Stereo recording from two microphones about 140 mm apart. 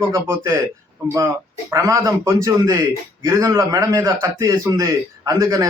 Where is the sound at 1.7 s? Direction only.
20° right (ahead or behind).